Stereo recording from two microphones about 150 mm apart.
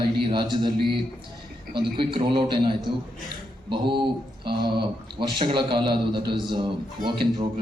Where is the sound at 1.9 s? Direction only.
35° right (ahead or behind).